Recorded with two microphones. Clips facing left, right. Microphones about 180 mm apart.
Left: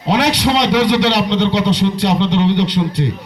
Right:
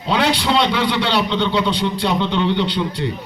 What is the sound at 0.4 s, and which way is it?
A man's voice, 70° left (ahead or behind).